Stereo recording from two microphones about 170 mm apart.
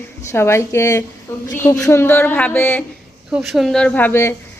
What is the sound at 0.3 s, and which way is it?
A woman's voice, 15° left (ahead or behind).